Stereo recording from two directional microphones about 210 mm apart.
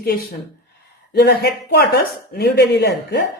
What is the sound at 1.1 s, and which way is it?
Speech, 50° left (ahead or behind).